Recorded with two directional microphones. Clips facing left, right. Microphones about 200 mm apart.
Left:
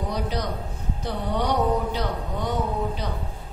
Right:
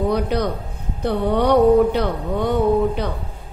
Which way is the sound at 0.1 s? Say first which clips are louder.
Right 8 dB; 60° right (ahead or behind).